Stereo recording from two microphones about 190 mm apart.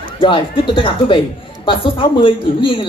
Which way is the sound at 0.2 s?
25° left (ahead or behind).